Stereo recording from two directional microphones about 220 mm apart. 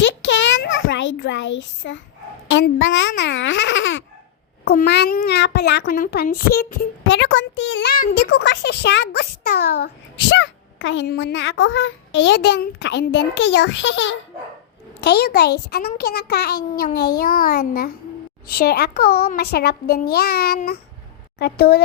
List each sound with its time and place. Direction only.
0.0 s a sound: 55° left (ahead or behind)
2.5 s a child's voice: 60° left (ahead or behind)
4.6 s a child's voice: 45° left (ahead or behind)